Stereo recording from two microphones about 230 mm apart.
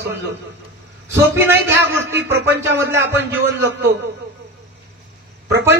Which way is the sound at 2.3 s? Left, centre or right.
Centre.